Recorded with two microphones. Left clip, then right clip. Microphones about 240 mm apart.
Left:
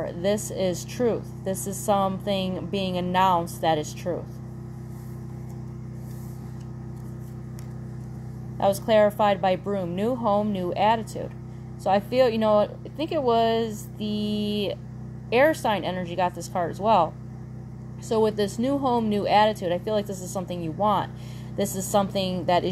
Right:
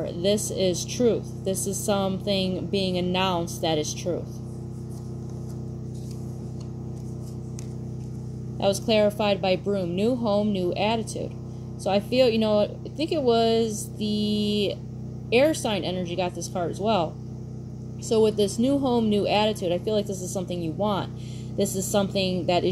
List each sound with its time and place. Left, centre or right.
0.0 s a woman's voice: left
8.8 s a woman's voice: left